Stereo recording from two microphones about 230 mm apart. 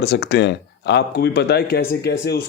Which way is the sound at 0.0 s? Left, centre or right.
Left.